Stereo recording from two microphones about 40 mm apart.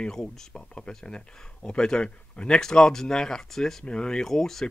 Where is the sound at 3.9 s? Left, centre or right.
Left.